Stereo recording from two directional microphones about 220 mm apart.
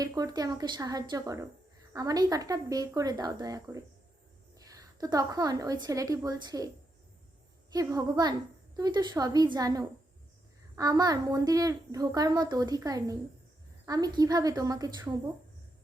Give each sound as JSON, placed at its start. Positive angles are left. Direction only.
{"t": 0.0, "sound": "a child's voice", "side_deg": -15}
{"t": 7.7, "sound": "a child's voice", "side_deg": -15}